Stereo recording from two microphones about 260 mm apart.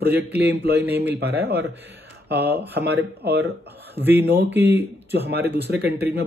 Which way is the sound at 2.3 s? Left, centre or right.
Right.